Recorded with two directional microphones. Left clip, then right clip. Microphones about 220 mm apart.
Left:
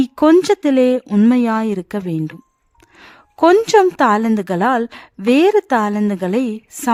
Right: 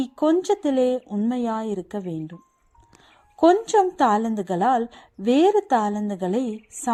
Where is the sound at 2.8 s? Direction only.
35° left (ahead or behind).